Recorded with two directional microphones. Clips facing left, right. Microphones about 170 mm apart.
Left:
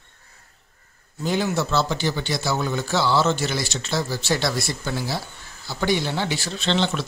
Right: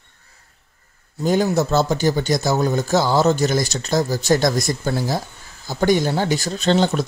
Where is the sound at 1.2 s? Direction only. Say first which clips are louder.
Right 5 dB; 45° right (ahead or behind).